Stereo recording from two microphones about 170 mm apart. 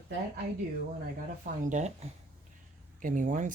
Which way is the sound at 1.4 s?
45° right (ahead or behind).